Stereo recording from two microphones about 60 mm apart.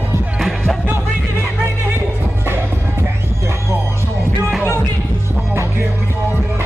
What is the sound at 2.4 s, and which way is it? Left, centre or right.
Music, right.